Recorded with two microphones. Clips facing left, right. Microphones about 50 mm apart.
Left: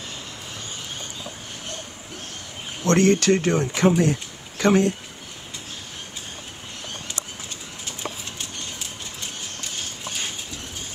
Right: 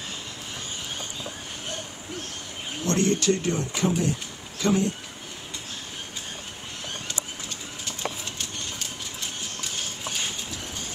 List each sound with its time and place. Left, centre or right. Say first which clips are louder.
2.8 s speech: left 6 dB; left